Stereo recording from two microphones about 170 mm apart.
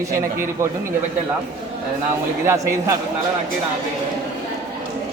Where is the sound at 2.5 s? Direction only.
15° right (ahead or behind).